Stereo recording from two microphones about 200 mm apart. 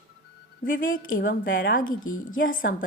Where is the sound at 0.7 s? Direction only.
40° left (ahead or behind).